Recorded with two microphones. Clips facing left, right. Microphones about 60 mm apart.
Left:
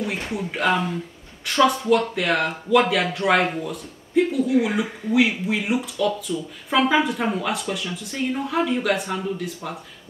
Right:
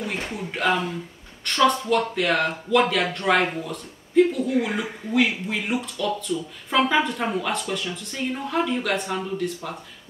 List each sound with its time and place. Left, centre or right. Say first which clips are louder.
0.0 s speech: left 3 dB; centre